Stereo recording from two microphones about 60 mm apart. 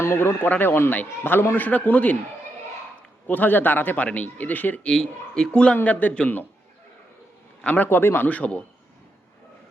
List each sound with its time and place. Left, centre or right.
0.0 s speech: left
0.4 s a man's voice: left
3.2 s speech: left
4.9 s speech: centre
5.7 s speech: left
7.6 s a man's voice: left
7.9 s a man's voice: left